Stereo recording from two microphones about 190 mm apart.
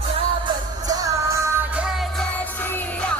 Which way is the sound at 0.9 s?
20° right (ahead or behind).